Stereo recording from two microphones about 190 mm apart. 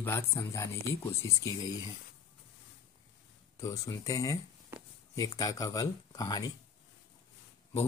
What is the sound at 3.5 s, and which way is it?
Speech, 15° left (ahead or behind).